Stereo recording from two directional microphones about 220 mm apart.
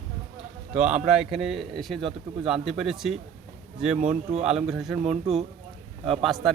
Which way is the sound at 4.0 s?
35° right (ahead or behind).